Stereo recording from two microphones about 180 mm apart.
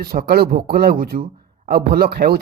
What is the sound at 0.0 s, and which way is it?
Speech, 55° right (ahead or behind).